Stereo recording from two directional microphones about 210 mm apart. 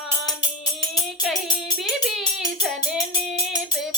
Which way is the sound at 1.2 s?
Centre (ahead or behind).